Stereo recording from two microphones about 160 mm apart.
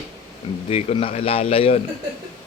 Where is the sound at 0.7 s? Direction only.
40° left (ahead or behind).